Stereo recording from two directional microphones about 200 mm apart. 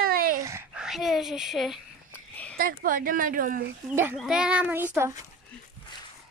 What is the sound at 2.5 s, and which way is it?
Speech, 45° right (ahead or behind).